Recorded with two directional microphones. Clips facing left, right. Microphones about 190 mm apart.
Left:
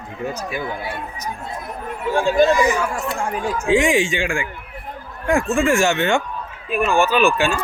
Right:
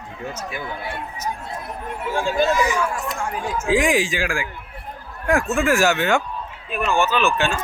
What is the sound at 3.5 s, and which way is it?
Speech, 5° right (ahead or behind).